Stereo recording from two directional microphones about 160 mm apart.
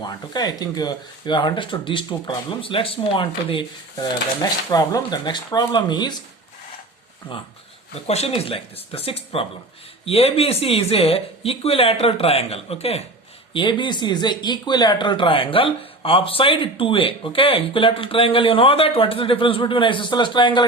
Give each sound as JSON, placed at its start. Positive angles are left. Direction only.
{"t": 0.0, "sound": "speech", "side_deg": 25}
{"t": 8.0, "sound": "speech", "side_deg": 40}